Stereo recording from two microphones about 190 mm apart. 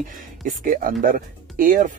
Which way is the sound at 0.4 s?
45° right (ahead or behind).